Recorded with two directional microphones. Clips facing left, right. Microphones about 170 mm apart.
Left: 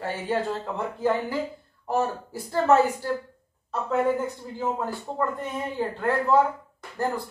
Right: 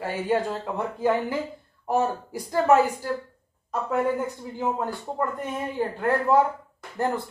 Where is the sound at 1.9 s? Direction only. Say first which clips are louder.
Right 2 dB; 15° right (ahead or behind).